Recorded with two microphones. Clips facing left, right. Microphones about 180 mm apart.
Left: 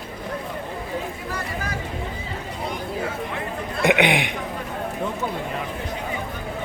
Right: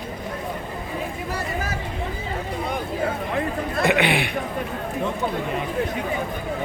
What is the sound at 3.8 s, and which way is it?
Speech, 15° left (ahead or behind).